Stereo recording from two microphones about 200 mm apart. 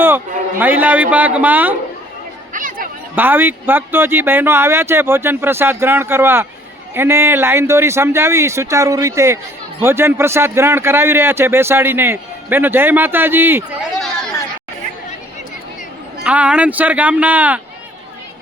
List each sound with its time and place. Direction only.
0.6 s a man's voice: 10° right (ahead or behind)
2.5 s chatter: 40° right (ahead or behind)
3.2 s a man's voice: 10° right (ahead or behind)
16.2 s a man's voice: 5° right (ahead or behind)